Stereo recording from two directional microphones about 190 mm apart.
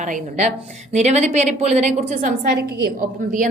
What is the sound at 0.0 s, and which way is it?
A woman's voice, 40° right (ahead or behind).